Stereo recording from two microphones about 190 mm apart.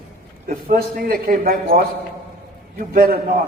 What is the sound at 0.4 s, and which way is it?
A man's voice, 45° right (ahead or behind).